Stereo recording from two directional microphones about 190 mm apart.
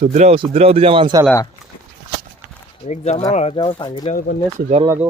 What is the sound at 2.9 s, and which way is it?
Speech, 35° left (ahead or behind).